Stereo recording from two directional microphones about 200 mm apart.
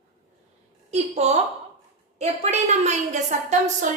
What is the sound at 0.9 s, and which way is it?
A woman's voice, 35° right (ahead or behind).